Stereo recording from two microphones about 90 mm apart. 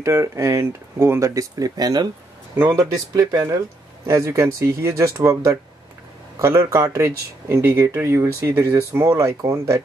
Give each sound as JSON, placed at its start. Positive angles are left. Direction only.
{"t": 0.0, "sound": "speech", "side_deg": -30}
{"t": 4.1, "sound": "speech", "side_deg": -35}